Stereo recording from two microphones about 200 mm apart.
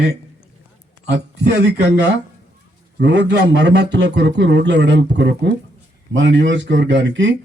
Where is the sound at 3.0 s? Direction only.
60° right (ahead or behind).